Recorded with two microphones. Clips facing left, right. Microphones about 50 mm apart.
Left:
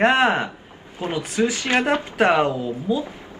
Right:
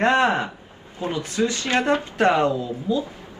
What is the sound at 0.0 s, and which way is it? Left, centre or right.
Speech, left.